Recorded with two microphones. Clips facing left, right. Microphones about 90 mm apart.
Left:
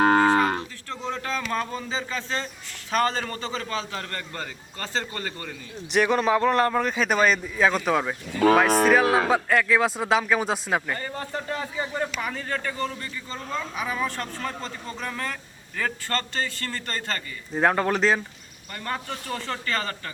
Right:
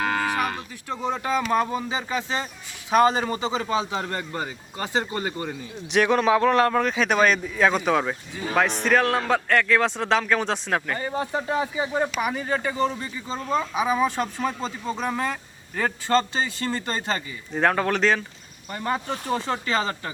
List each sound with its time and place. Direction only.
0.0 s cattle: 35° left (ahead or behind)
0.9 s speech: 15° right (ahead or behind)
5.9 s a man's voice: centre (ahead or behind)
10.9 s speech: 15° right (ahead or behind)
17.5 s a man's voice: 5° left (ahead or behind)
18.7 s speech: 15° right (ahead or behind)